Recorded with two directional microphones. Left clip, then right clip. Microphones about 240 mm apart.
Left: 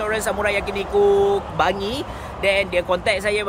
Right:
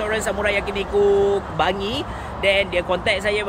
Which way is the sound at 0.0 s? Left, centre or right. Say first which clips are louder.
Even; centre.